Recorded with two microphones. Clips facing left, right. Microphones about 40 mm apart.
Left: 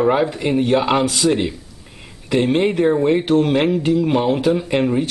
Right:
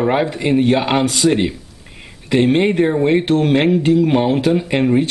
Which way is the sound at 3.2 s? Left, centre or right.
Right.